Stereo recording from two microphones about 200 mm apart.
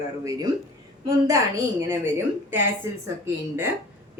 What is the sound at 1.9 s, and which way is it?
Speech, 10° right (ahead or behind).